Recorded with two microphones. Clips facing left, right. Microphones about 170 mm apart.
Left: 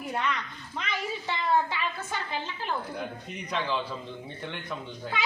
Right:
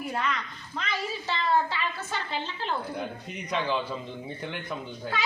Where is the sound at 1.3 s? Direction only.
15° left (ahead or behind).